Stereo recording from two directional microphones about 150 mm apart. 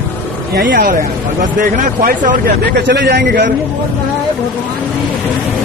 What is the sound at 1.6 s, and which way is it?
A man's voice, 60° right (ahead or behind).